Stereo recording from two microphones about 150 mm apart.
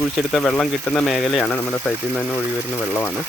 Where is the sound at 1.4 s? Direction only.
10° left (ahead or behind).